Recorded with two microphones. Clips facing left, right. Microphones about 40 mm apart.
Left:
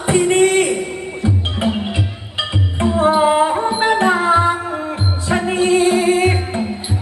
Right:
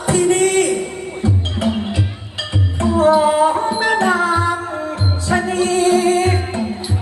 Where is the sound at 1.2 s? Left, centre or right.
Left.